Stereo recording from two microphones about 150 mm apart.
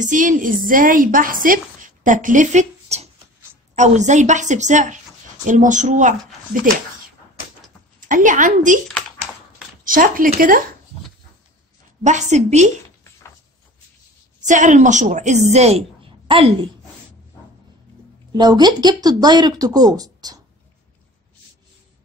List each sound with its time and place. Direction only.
0.0 s a woman's voice: 60° right (ahead or behind)
8.0 s a woman's voice: 60° right (ahead or behind)
9.8 s speech: 65° right (ahead or behind)
12.0 s a woman's voice: 50° right (ahead or behind)
14.4 s a woman's voice: 55° right (ahead or behind); by 16.5 s 40° right (ahead or behind)
18.3 s speech: 25° right (ahead or behind)